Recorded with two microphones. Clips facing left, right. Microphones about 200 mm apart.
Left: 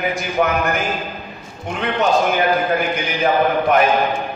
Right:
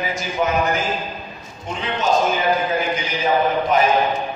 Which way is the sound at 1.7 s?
60° left (ahead or behind).